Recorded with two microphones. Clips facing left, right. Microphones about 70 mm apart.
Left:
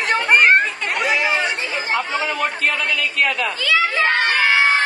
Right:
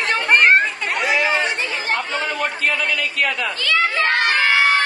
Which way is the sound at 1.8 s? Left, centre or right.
Right.